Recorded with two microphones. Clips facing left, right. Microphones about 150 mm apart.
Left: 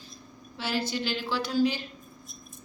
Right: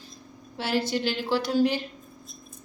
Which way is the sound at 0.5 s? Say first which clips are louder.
Right 4 dB; 65° right (ahead or behind).